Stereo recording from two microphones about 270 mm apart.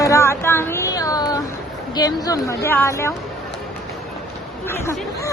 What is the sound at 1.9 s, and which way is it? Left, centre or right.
Speech, centre.